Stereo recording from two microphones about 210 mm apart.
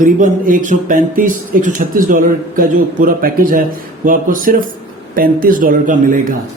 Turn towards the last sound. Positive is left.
turn(degrees=-40)  # may be behind; listen again after turning